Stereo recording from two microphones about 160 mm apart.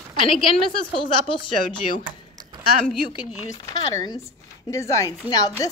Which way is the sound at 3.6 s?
20° left (ahead or behind).